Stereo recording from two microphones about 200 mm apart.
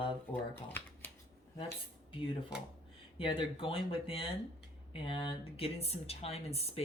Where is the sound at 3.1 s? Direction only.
25° left (ahead or behind).